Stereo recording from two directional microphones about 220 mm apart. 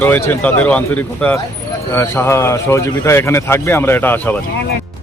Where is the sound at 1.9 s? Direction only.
10° left (ahead or behind).